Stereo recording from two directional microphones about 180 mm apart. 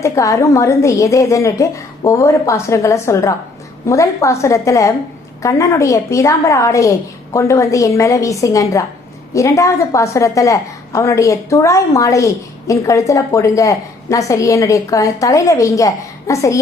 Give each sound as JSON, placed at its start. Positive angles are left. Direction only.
{"t": 0.0, "sound": "a woman's voice", "side_deg": 15}